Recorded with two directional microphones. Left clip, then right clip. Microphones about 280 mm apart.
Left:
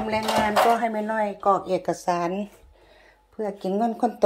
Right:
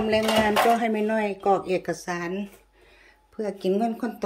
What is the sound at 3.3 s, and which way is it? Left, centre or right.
Speech, centre.